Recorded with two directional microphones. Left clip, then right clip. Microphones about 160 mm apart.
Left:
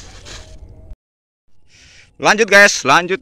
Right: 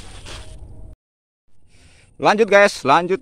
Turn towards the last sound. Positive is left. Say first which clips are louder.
# left 3 dB
turn(degrees=-10)  # may be behind; listen again after turning